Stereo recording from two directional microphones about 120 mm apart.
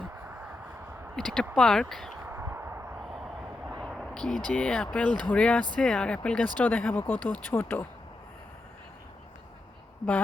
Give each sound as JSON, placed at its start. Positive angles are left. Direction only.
{"t": 1.1, "sound": "speech", "side_deg": 5}
{"t": 2.2, "sound": "a sound", "side_deg": -20}
{"t": 3.7, "sound": "speech", "side_deg": 0}